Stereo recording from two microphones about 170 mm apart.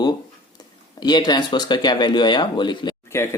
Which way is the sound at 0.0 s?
25° left (ahead or behind).